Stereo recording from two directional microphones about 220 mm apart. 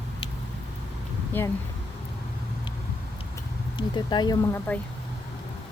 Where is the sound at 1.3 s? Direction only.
10° left (ahead or behind).